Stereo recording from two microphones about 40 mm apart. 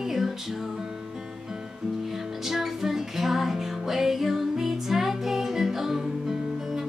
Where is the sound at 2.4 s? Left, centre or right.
Centre.